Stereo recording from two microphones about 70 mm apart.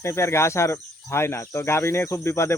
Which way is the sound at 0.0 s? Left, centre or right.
Left.